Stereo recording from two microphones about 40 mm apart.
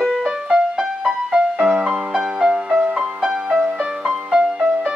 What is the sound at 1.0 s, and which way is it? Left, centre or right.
Music, right.